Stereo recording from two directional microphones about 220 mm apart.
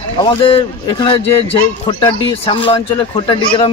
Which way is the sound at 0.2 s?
25° left (ahead or behind).